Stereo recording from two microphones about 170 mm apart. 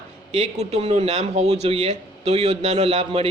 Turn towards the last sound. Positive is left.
turn(degrees=-35)  # may be behind; listen again after turning